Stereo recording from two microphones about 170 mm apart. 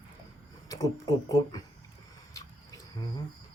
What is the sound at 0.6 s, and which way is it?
Speech, 20° left (ahead or behind).